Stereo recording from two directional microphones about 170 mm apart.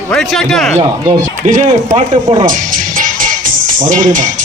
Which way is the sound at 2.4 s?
50° right (ahead or behind).